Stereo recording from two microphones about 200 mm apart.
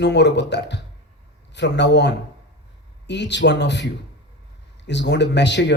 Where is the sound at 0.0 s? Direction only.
60° left (ahead or behind).